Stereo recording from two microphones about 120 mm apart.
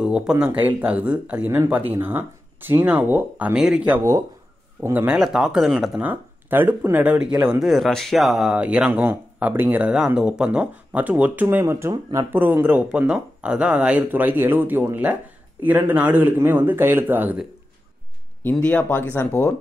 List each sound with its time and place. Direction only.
0.0 s speech: 5° right (ahead or behind)
5.1 s speech: 5° right (ahead or behind)
5.9 s speech: 15° right (ahead or behind)
7.6 s speech: centre (ahead or behind); by 17.5 s 15° right (ahead or behind)
18.4 s speech: 10° left (ahead or behind)